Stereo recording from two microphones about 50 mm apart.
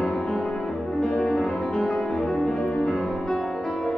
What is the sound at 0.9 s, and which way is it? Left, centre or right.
Music, centre.